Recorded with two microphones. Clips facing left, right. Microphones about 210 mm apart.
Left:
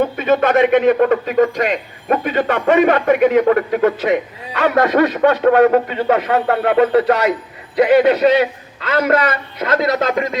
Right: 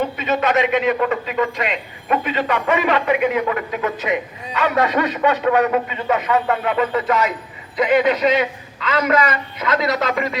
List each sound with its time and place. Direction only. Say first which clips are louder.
0.0 s a man's voice: left 5 dB; 50° left (ahead or behind)